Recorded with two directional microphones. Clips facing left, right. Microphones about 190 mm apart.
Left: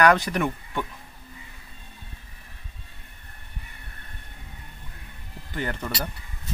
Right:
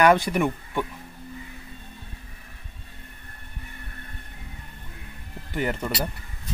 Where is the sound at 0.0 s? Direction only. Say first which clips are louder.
Right 1 dB; 15° right (ahead or behind).